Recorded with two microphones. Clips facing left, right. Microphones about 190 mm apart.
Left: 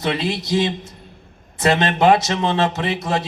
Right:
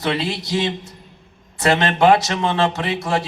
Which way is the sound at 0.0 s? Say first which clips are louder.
Even; 20° left (ahead or behind).